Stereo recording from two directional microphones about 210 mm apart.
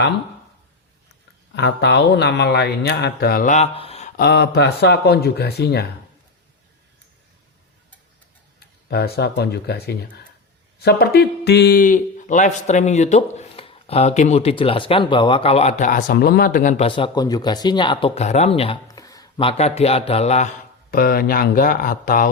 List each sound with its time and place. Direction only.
1.5 s speech: 55° left (ahead or behind); by 4.1 s 30° left (ahead or behind)
4.2 s speech: 50° left (ahead or behind)
8.5 s speech: 50° left (ahead or behind); by 18.8 s 25° left (ahead or behind)
18.9 s speech: 15° left (ahead or behind)
20.9 s speech: 45° left (ahead or behind)